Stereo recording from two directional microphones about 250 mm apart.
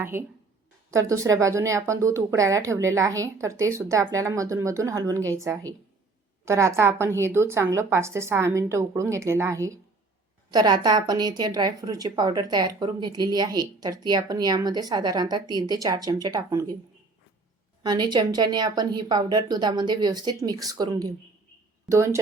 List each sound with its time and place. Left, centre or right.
0.0 s a woman's voice: centre
17.8 s a woman's voice: centre